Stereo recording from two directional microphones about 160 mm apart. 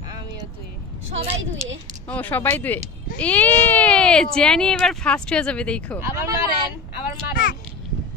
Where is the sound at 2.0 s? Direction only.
10° left (ahead or behind).